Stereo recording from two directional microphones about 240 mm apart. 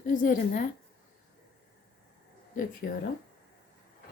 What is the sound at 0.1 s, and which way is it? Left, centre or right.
Speech, left.